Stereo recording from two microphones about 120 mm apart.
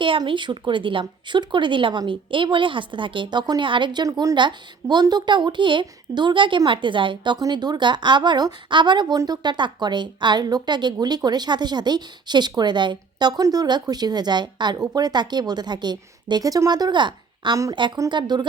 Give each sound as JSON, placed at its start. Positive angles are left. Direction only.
{"t": 0.0, "sound": "a woman's voice", "side_deg": -45}